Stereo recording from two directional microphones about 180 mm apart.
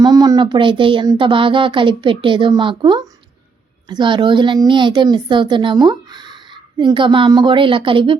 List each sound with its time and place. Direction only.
0.0 s a child's voice: 20° right (ahead or behind)